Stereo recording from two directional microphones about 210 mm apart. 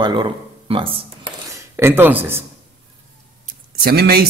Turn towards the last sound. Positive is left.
turn(degrees=-50)  # may be behind; listen again after turning